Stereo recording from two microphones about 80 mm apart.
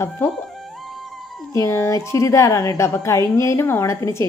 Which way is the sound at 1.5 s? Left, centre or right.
Left.